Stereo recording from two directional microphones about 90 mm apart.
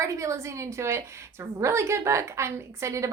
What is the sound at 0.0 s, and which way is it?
A woman's voice, 35° right (ahead or behind).